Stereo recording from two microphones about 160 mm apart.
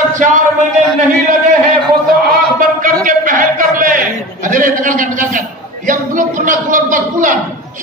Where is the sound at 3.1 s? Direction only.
55° right (ahead or behind).